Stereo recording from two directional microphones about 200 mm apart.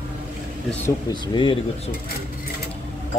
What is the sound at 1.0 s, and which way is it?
Speech, 25° left (ahead or behind).